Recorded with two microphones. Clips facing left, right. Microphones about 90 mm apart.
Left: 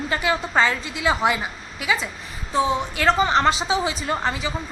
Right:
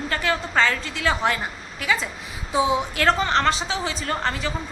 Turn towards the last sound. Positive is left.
turn(degrees=5)  # may be behind; listen again after turning